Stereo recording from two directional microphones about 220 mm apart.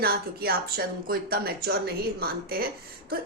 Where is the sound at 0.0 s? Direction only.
45° right (ahead or behind).